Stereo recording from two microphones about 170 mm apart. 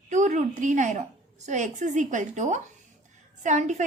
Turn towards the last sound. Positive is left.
turn(degrees=-45)  # may be behind; listen again after turning